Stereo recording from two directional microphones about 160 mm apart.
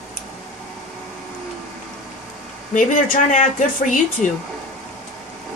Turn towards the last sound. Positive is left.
turn(degrees=50)  # may be behind; listen again after turning